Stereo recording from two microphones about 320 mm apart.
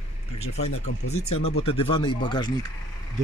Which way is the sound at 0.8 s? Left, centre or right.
Centre.